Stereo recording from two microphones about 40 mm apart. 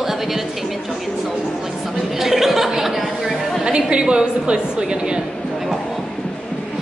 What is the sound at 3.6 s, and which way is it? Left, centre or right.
A woman's voice, right.